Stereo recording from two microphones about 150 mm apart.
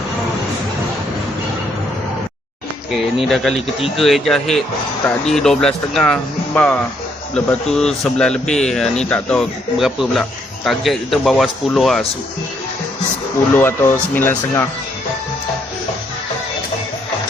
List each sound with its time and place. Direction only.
3.2 s a man's voice: centre (ahead or behind)
3.5 s speech: 40° left (ahead or behind)
4.0 s a man's voice: centre (ahead or behind)
13.5 s speech: 15° left (ahead or behind)